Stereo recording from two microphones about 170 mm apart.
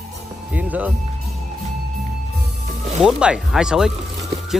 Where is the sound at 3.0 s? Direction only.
5° right (ahead or behind).